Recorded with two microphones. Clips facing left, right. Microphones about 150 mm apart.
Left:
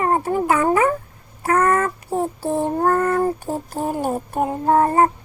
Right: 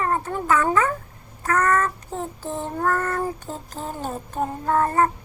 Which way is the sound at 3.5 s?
55° left (ahead or behind).